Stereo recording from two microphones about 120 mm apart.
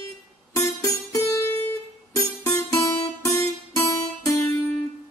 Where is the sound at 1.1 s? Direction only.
25° left (ahead or behind).